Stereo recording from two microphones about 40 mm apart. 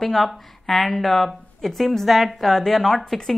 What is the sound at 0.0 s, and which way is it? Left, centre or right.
A woman's voice, centre.